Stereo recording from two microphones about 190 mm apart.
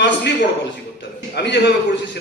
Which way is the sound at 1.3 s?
60° left (ahead or behind).